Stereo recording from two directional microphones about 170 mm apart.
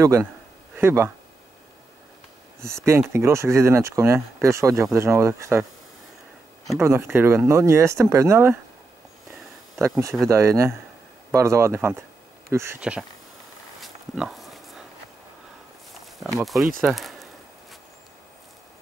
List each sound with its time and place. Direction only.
0.0 s speech: 15° right (ahead or behind)
2.6 s speech: 15° right (ahead or behind)
6.8 s speech: 15° right (ahead or behind)
9.8 s speech: 15° right (ahead or behind)
13.7 s pig: centre (ahead or behind)
16.8 s a sound: centre (ahead or behind)